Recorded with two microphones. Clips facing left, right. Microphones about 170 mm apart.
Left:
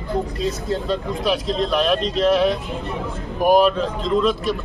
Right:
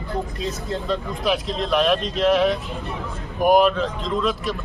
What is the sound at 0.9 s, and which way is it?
Speech, centre (ahead or behind).